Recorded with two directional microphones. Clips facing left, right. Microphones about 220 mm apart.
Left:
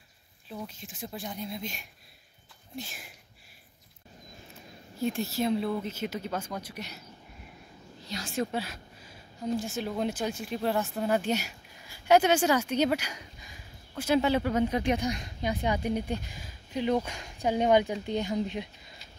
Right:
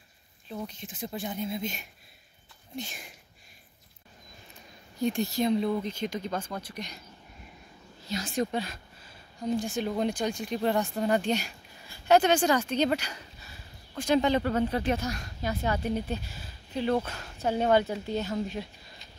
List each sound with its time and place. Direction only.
0.5 s speech: centre (ahead or behind)
4.9 s speech: centre (ahead or behind)
8.1 s a sound: centre (ahead or behind)
9.5 s speech: centre (ahead or behind); by 18.7 s 15° left (ahead or behind)